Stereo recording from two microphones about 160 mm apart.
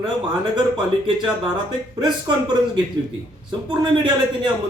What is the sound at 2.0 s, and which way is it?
Speech, 25° right (ahead or behind).